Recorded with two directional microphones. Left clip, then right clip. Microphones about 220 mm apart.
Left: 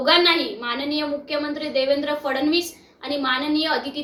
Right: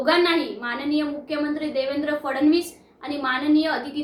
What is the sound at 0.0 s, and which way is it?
A woman's voice, 20° right (ahead or behind).